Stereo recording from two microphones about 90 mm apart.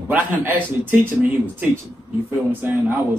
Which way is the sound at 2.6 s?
25° right (ahead or behind).